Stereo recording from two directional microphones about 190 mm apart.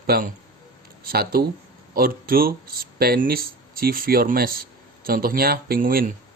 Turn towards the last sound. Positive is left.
turn(degrees=-50)  # may be behind; listen again after turning